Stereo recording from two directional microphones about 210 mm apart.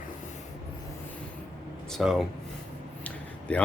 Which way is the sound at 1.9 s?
Centre (ahead or behind).